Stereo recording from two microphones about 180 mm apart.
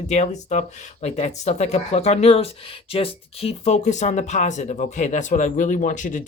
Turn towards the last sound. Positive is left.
turn(degrees=45)  # may be behind; listen again after turning